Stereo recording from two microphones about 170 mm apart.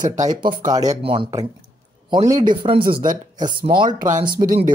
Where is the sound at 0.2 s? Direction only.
25° right (ahead or behind).